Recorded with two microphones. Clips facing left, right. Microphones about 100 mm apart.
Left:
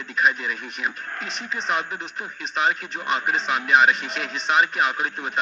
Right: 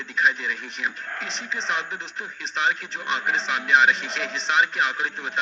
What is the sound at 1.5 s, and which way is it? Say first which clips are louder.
Speech: left 3 dB; 5° left (ahead or behind).